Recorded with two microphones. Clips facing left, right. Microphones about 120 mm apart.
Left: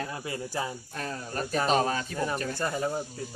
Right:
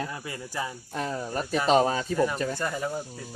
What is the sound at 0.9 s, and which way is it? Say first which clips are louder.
Speech: right 5 dB; 20° right (ahead or behind).